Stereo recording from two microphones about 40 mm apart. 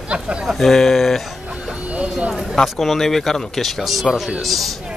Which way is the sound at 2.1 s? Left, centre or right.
Centre.